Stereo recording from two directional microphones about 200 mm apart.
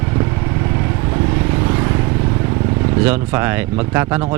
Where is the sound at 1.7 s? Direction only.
20° right (ahead or behind).